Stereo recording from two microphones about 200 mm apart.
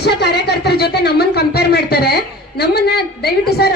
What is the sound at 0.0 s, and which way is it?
A woman's voice, 55° left (ahead or behind).